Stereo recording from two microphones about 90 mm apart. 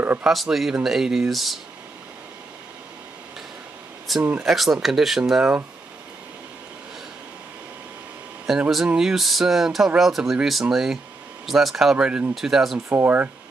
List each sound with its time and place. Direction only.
0.2 s speech: centre (ahead or behind)
4.2 s speech: 15° right (ahead or behind)
4.5 s speech: centre (ahead or behind)
8.5 s speech: 5° right (ahead or behind)
12.9 s speech: 20° right (ahead or behind)